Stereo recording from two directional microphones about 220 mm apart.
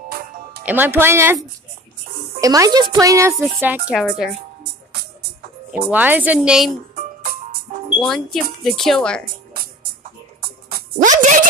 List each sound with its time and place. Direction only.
0.1 s music: 40° right (ahead or behind)
0.7 s speech: 10° right (ahead or behind)
2.4 s speech: 15° right (ahead or behind)
5.9 s speech: 5° right (ahead or behind)
8.0 s speech: centre (ahead or behind)
9.2 s music: 40° right (ahead or behind)